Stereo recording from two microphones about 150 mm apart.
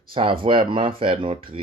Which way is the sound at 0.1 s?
35° right (ahead or behind).